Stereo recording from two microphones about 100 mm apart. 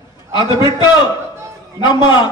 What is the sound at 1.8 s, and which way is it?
Speech, 50° left (ahead or behind).